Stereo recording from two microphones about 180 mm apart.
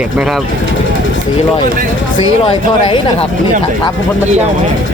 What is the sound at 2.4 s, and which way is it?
Speech, 30° left (ahead or behind).